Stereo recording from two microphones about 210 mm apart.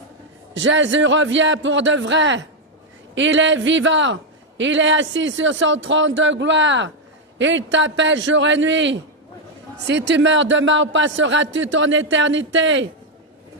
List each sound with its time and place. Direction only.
0.5 s a man's voice: 60° right (ahead or behind)